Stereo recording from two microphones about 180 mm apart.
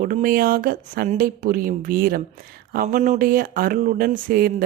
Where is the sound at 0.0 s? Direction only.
50° right (ahead or behind).